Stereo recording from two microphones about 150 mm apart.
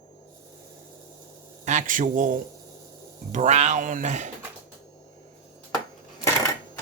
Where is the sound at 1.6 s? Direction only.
55° right (ahead or behind).